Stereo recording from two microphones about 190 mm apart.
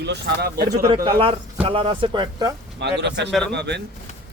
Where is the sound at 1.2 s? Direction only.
30° right (ahead or behind).